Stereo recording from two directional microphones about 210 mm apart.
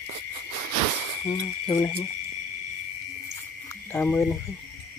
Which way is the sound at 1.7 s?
30° left (ahead or behind).